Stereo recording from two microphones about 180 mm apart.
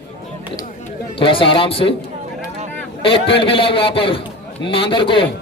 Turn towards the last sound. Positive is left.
turn(degrees=30)  # may be behind; listen again after turning